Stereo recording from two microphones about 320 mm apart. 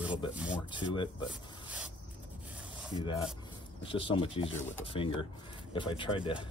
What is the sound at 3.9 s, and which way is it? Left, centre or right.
Speech, centre.